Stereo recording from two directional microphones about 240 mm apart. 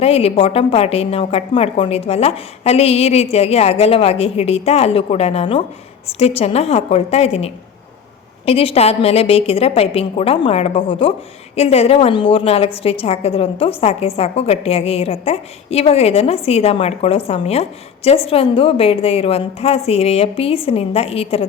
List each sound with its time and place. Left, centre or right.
0.0 s a woman's voice: left